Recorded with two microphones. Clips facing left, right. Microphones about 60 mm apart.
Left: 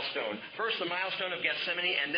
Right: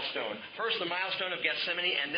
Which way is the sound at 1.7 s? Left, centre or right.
Left.